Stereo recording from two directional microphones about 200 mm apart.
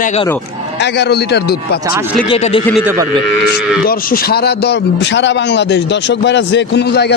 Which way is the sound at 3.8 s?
50° left (ahead or behind).